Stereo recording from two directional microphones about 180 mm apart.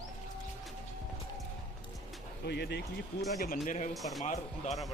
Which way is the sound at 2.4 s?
65° left (ahead or behind).